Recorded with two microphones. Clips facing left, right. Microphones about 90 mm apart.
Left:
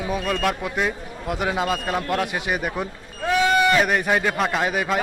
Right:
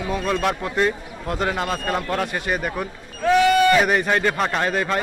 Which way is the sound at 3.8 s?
Centre (ahead or behind).